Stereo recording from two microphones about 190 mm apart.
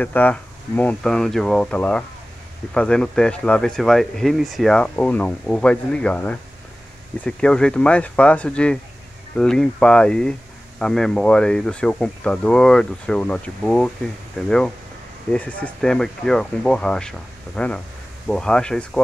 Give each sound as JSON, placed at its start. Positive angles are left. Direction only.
{"t": 0.0, "sound": "speech", "side_deg": 10}